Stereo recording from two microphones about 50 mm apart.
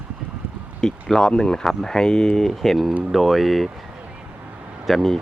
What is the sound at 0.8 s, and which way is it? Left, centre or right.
Speech, centre.